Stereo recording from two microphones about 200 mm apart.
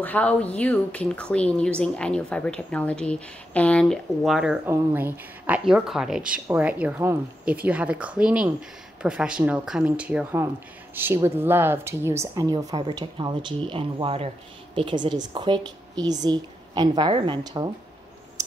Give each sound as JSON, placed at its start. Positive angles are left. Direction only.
{"t": 0.0, "sound": "speech", "side_deg": 5}